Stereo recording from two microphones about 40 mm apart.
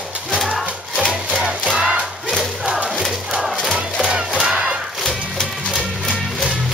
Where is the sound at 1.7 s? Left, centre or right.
Centre.